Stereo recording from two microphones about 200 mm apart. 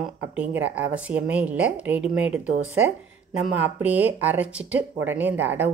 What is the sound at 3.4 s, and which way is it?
Speech, 10° right (ahead or behind).